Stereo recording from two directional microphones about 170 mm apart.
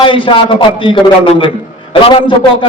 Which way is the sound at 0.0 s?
30° left (ahead or behind).